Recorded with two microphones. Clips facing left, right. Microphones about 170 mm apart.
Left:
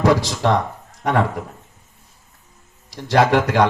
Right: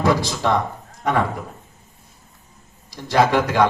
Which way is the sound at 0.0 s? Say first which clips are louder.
Left 2 dB; 75° left (ahead or behind).